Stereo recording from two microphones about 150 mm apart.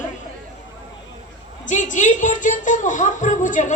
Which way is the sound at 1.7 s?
55° left (ahead or behind).